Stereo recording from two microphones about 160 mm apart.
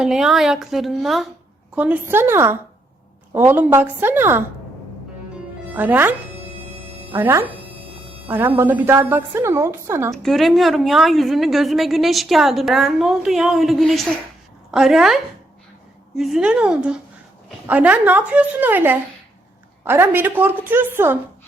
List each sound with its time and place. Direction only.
0.0 s a woman's voice: 5° right (ahead or behind)
5.7 s a woman's voice: 10° right (ahead or behind)
10.1 s a woman's voice: centre (ahead or behind)